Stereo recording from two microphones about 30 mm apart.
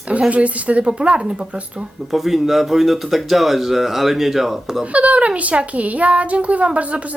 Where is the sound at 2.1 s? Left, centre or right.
Centre.